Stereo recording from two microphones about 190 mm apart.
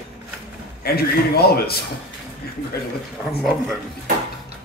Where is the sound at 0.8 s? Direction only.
55° left (ahead or behind).